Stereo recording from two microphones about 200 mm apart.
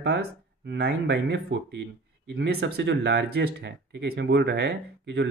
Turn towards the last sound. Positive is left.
turn(degrees=-55)  # may be behind; listen again after turning